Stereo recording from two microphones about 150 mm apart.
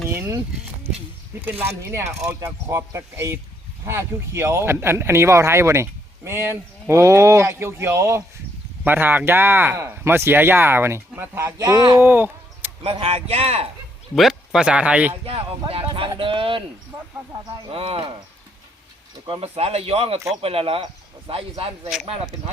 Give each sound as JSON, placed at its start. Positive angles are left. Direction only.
{"t": 0.1, "sound": "a sound", "side_deg": -20}
{"t": 1.4, "sound": "speech", "side_deg": -15}
{"t": 11.9, "sound": "a sound", "side_deg": -15}
{"t": 12.8, "sound": "speech", "side_deg": -40}
{"t": 14.2, "sound": "speech", "side_deg": 0}
{"t": 15.2, "sound": "speech", "side_deg": -40}
{"t": 17.7, "sound": "speech", "side_deg": -40}
{"t": 19.3, "sound": "speech", "side_deg": -40}